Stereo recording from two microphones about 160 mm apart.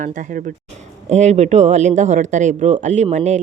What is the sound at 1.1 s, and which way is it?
A woman's voice, 45° right (ahead or behind).